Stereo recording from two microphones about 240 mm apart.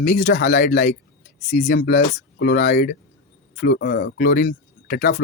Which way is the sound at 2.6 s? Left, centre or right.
Left.